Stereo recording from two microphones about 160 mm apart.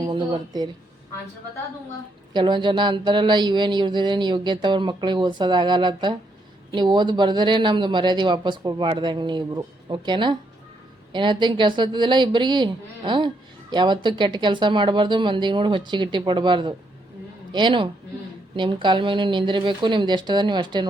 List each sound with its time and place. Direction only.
0.1 s speech: 30° right (ahead or behind)
2.3 s a man's voice: 30° right (ahead or behind)